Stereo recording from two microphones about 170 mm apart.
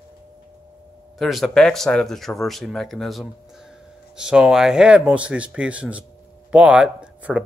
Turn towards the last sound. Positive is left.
turn(degrees=-5)  # may be behind; listen again after turning